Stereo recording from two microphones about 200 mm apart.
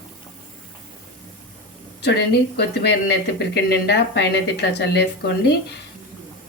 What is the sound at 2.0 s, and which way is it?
Speech, 55° left (ahead or behind).